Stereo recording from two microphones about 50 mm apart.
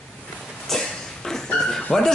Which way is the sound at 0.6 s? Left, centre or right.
Centre.